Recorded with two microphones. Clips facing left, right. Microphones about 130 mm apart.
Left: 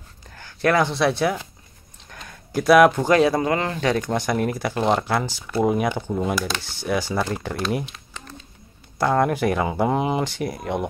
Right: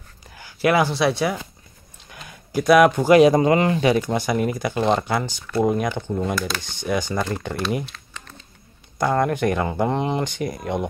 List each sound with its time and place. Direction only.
0.3 s speech: 10° right (ahead or behind)
2.0 s a sound: 5° right (ahead or behind)
3.1 s speech: 15° right (ahead or behind); by 7.8 s centre (ahead or behind)
7.8 s typing: 15° left (ahead or behind)
8.9 s speech: centre (ahead or behind)